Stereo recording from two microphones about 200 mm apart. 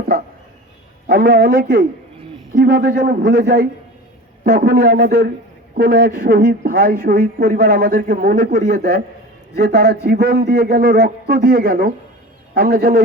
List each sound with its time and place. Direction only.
1.0 s speech: 50° right (ahead or behind)